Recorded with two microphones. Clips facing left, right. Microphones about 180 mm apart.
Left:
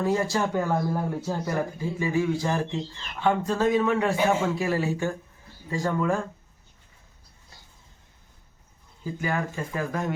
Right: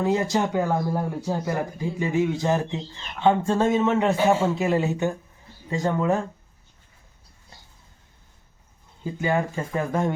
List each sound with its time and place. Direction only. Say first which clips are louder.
0.0 s a man's voice: right 2 dB; 20° right (ahead or behind)
9.0 s a man's voice: right 4 dB; 25° right (ahead or behind)